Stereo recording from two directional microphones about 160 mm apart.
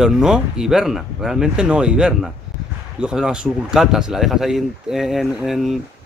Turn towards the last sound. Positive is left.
turn(degrees=0)  # may be behind; listen again after turning